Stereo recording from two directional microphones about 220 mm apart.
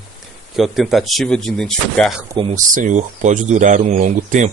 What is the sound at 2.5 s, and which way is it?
Speech, 35° right (ahead or behind).